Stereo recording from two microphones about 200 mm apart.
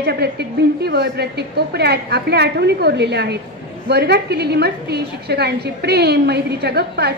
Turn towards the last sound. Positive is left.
turn(degrees=-55)  # may be behind; listen again after turning